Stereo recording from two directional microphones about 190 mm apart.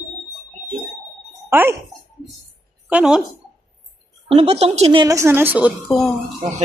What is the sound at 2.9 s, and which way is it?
Speech, 5° right (ahead or behind).